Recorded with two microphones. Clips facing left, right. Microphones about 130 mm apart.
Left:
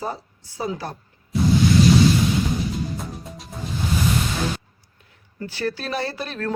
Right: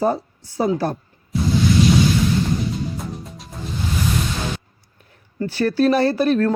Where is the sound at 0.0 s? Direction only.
50° right (ahead or behind).